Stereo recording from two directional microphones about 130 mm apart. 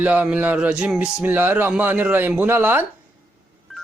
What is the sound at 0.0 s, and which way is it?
Speech, 10° right (ahead or behind).